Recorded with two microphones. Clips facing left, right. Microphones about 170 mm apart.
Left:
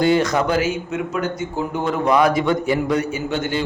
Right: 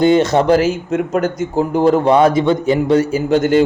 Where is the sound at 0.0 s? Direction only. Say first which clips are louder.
Right 5 dB; 25° right (ahead or behind).